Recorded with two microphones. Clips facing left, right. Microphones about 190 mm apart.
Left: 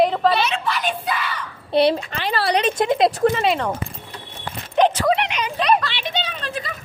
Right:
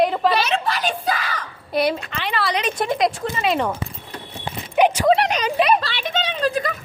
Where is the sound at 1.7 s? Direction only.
30° left (ahead or behind).